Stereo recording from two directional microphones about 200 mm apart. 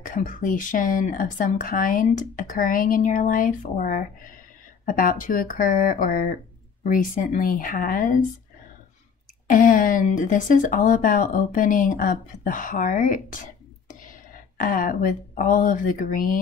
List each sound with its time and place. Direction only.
0.0 s speech: 45° left (ahead or behind)
9.5 s speech: 40° left (ahead or behind)